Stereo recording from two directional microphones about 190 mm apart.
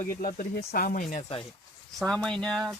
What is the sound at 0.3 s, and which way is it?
Speech, 55° left (ahead or behind).